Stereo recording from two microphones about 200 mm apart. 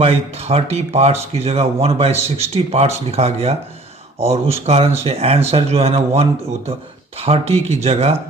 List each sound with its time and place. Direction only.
0.0 s speech: 30° right (ahead or behind)